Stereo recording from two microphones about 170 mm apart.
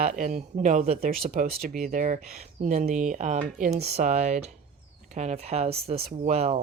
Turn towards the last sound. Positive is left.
turn(degrees=-40)  # may be behind; listen again after turning